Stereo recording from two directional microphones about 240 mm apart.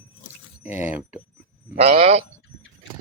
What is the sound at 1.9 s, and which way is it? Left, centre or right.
Speech, right.